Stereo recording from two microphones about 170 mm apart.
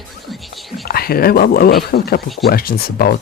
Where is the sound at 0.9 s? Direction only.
65° left (ahead or behind).